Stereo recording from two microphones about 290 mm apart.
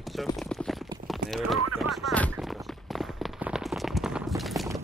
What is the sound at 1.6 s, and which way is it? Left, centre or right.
Speech, right.